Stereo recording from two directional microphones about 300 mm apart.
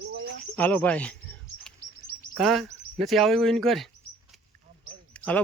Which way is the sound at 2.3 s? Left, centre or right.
Centre.